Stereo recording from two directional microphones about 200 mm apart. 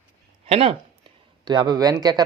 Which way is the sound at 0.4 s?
30° right (ahead or behind).